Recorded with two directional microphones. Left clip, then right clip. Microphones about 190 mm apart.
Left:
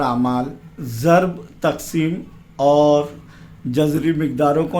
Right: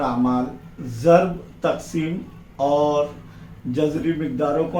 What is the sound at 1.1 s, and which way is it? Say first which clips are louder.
Mantra: even; 55° left (ahead or behind).